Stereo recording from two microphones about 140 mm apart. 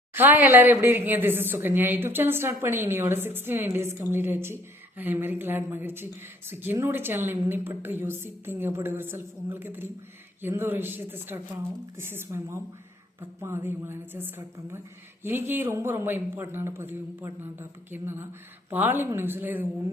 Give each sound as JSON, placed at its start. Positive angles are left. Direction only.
{"t": 0.1, "sound": "a woman's voice", "side_deg": -15}